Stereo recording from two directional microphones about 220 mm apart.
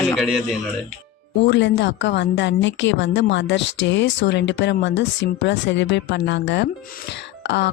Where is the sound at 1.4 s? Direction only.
50° left (ahead or behind).